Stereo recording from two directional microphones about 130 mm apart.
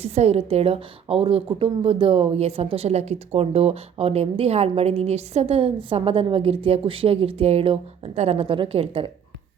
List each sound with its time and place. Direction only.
0.0 s a woman's voice: 55° right (ahead or behind)